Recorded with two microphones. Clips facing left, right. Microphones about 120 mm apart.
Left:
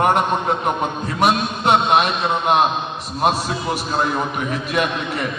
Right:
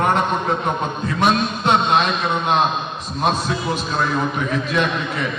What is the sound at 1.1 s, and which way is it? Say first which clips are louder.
A man's voice: even; 10° left (ahead or behind).